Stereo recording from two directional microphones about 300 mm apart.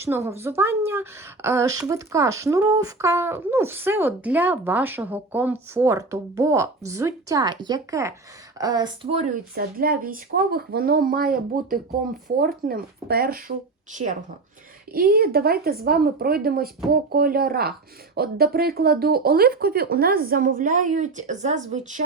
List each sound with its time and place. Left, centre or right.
0.0 s speech: centre